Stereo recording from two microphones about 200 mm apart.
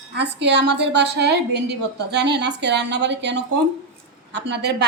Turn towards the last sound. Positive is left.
turn(degrees=-60)  # may be behind; listen again after turning